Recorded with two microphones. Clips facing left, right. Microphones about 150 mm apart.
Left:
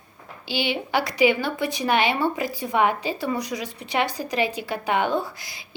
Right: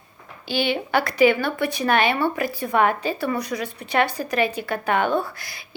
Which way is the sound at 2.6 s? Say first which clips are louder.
Right 2 dB; 15° left (ahead or behind).